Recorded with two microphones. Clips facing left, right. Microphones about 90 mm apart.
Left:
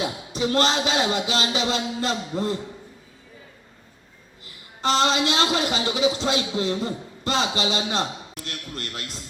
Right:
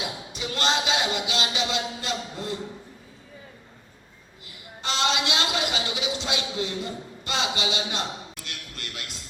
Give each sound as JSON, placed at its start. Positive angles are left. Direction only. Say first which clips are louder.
{"t": 0.0, "sound": "a man's voice", "louder": "left 7 dB", "side_deg": 40}
{"t": 4.8, "sound": "a man's voice", "louder": "left 5 dB", "side_deg": 40}